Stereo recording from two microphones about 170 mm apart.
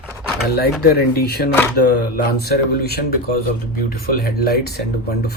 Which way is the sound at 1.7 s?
70° left (ahead or behind).